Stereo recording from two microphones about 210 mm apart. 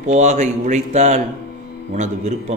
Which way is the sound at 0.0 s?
35° right (ahead or behind).